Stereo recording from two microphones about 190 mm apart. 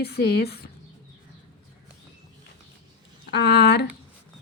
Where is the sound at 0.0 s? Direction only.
60° left (ahead or behind).